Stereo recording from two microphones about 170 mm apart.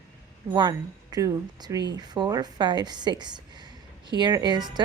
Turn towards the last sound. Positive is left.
turn(degrees=-25)  # may be behind; listen again after turning